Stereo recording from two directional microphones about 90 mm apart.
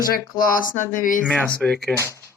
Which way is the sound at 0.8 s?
15° left (ahead or behind).